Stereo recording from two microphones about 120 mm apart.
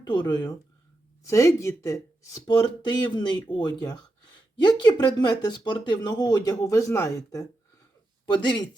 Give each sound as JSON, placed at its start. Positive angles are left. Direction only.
{"t": 0.1, "sound": "speech", "side_deg": 35}
{"t": 1.3, "sound": "speech", "side_deg": 25}
{"t": 2.5, "sound": "speech", "side_deg": 40}